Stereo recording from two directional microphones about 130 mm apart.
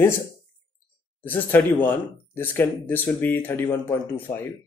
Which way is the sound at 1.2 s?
15° left (ahead or behind).